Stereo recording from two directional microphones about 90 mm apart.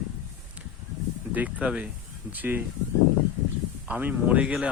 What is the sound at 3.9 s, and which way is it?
Speech, 20° right (ahead or behind).